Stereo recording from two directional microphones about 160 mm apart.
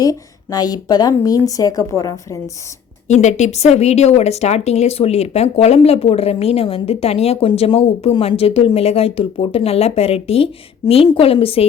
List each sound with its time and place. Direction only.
0.0 s a woman's voice: 25° left (ahead or behind)
3.1 s speech: 45° left (ahead or behind)